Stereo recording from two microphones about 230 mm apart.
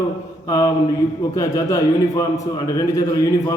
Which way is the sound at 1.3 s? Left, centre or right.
Centre.